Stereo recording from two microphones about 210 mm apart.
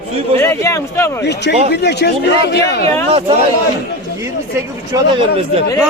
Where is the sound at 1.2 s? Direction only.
55° left (ahead or behind).